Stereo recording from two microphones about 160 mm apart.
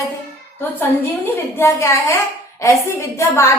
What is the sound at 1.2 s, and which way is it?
Speech, 15° left (ahead or behind).